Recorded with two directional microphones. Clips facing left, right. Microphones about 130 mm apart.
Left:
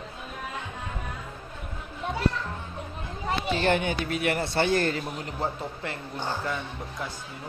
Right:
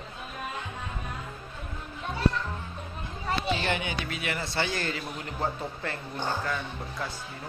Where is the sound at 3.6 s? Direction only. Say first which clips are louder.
Left 6 dB; 50° left (ahead or behind).